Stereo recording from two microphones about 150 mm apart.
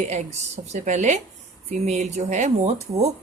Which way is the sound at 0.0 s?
50° right (ahead or behind).